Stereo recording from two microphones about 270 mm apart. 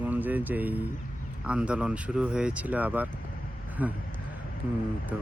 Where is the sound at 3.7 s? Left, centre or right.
Centre.